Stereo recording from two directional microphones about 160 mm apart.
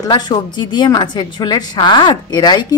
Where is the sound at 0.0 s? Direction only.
25° left (ahead or behind).